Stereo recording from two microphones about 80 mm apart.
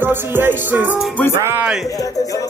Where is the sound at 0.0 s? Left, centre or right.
Right.